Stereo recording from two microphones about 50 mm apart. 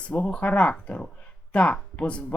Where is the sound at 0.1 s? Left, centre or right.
Left.